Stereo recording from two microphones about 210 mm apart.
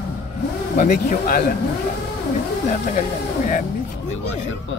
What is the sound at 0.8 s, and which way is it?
Speech, 40° left (ahead or behind).